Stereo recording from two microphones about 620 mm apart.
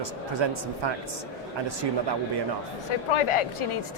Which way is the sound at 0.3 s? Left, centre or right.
Right.